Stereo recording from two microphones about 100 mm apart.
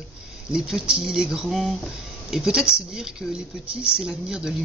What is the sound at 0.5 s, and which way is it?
Speech, 5° right (ahead or behind).